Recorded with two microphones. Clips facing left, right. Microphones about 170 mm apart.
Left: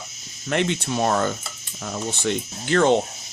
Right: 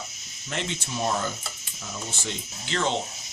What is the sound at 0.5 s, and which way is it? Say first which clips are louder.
Speech: left 9 dB; 60° left (ahead or behind).